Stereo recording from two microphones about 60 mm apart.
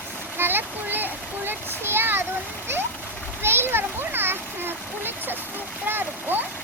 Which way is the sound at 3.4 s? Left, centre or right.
Right.